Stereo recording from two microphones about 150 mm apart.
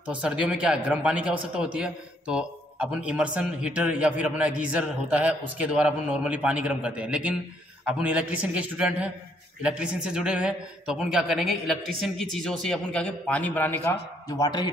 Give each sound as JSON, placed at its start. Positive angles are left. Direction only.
{"t": 0.0, "sound": "a man's voice", "side_deg": -10}
{"t": 14.2, "sound": "a man's voice", "side_deg": 25}